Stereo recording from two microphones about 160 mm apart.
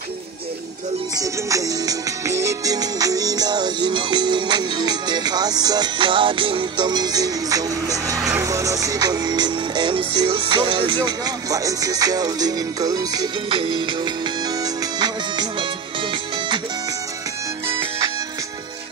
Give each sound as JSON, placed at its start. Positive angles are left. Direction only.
{"t": 1.1, "sound": "music", "side_deg": -20}